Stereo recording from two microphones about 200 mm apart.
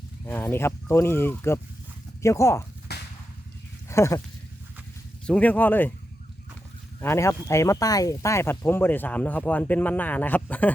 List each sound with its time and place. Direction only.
0.3 s speech: 10° left (ahead or behind)
2.9 s a sound: 55° left (ahead or behind)
3.8 s speech: 15° left (ahead or behind)
5.2 s speech: 5° left (ahead or behind)
7.0 s speech: 15° left (ahead or behind)